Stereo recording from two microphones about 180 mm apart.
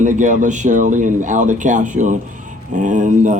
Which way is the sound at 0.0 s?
45° right (ahead or behind).